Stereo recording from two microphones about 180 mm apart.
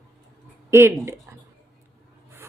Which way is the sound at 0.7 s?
15° right (ahead or behind).